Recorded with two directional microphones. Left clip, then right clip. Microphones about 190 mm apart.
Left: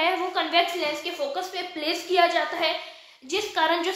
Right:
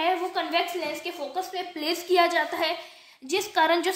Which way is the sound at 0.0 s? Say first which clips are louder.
Left 2 dB; 30° right (ahead or behind).